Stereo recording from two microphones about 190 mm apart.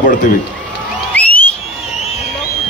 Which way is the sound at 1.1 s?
10° left (ahead or behind).